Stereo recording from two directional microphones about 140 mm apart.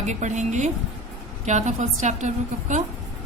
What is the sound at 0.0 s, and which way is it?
Speech, 55° right (ahead or behind).